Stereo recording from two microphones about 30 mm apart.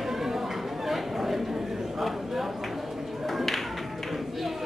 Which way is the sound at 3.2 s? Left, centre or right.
Centre.